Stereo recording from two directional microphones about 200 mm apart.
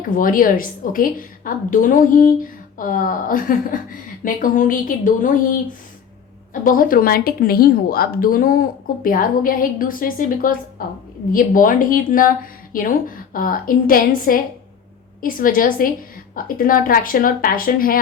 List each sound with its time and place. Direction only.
0.1 s speech: 45° left (ahead or behind)
6.5 s speech: 45° left (ahead or behind)